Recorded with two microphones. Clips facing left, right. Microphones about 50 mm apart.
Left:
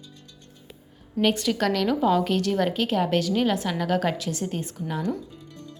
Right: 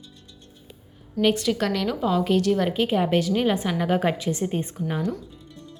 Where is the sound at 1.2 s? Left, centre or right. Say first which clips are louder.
Right 1 dB; centre.